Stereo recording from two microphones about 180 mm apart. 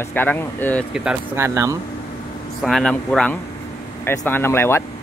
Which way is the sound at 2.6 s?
5° left (ahead or behind).